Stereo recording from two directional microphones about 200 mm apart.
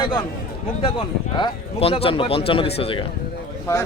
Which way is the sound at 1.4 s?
30° left (ahead or behind).